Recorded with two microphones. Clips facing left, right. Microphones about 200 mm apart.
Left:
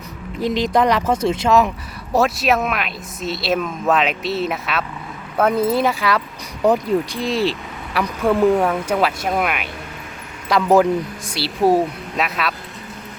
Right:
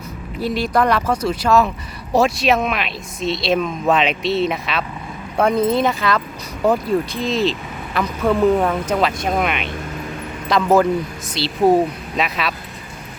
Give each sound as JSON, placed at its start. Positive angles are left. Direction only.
{"t": 0.3, "sound": "speech", "side_deg": 20}
{"t": 2.1, "sound": "speech", "side_deg": 0}